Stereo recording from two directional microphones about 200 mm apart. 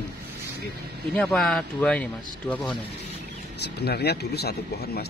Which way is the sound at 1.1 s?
Centre (ahead or behind).